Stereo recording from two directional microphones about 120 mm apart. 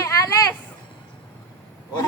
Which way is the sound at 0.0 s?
30° left (ahead or behind).